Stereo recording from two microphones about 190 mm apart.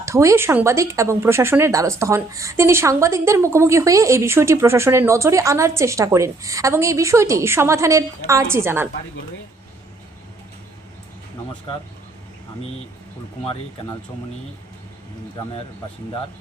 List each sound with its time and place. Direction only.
0.0 s speech: 15° right (ahead or behind)
11.7 s speech: 25° left (ahead or behind)